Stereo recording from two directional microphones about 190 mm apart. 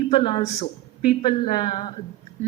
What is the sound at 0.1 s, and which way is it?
A woman's voice, 30° left (ahead or behind).